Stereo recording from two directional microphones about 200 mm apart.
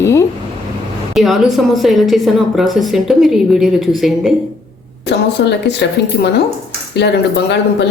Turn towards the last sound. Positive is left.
turn(degrees=60)  # may be behind; listen again after turning